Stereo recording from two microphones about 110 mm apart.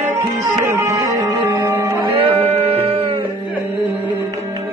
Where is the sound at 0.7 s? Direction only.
30° right (ahead or behind).